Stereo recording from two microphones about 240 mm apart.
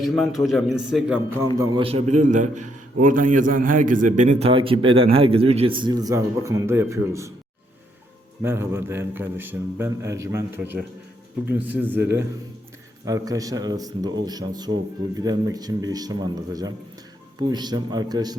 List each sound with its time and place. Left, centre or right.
0.0 s a man's voice: centre
1.5 s a man's voice: right
8.4 s speech: centre
11.4 s speech: centre
13.1 s speech: centre